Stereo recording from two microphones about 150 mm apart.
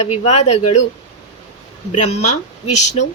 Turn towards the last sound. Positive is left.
turn(degrees=50)  # may be behind; listen again after turning